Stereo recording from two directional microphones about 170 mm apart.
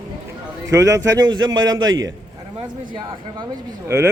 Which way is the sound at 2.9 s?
25° right (ahead or behind).